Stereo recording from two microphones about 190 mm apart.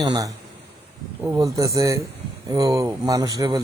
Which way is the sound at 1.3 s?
20° right (ahead or behind).